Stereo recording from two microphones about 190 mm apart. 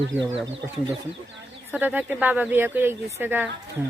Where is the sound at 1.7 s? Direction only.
10° right (ahead or behind).